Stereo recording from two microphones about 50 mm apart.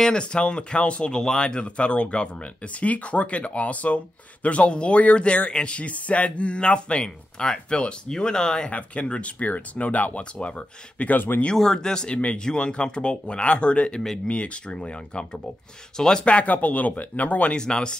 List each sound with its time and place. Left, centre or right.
0.0 s speech: centre
11.1 s speech: left
11.5 s speech: centre; by 17.6 s left
17.6 s speech: centre